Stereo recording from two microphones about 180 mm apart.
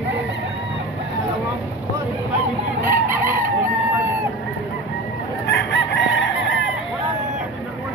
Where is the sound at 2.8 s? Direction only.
10° right (ahead or behind).